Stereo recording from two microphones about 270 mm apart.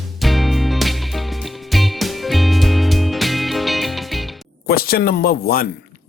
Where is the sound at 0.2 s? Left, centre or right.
Centre.